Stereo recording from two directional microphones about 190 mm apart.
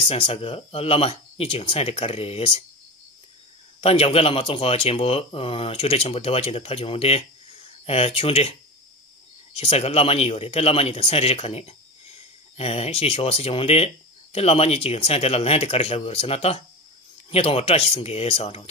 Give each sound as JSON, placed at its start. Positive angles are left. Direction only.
{"t": 0.1, "sound": "speech", "side_deg": 30}
{"t": 3.8, "sound": "speech", "side_deg": 30}
{"t": 9.6, "sound": "speech", "side_deg": 35}